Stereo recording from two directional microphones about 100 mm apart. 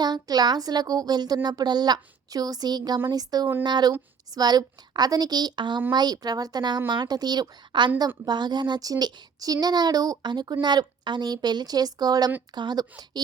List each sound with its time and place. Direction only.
0.0 s a woman's voice: 45° right (ahead or behind)